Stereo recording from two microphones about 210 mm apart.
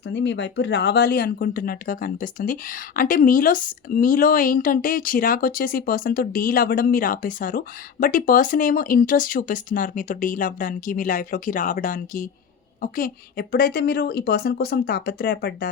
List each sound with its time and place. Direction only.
0.1 s a woman's voice: 60° left (ahead or behind)